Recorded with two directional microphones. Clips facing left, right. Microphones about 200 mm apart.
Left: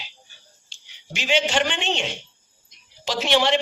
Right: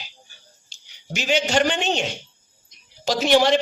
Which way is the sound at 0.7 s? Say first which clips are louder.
Right 5 dB; 40° right (ahead or behind).